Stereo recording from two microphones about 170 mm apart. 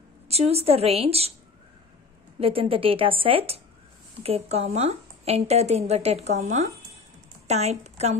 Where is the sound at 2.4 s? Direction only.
35° right (ahead or behind).